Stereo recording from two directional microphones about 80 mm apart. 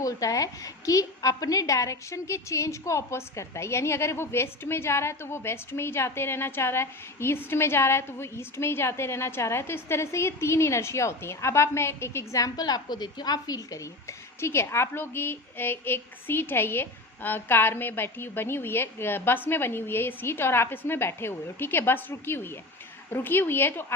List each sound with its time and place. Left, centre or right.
0.0 s a woman's voice: left
12.5 s speech: left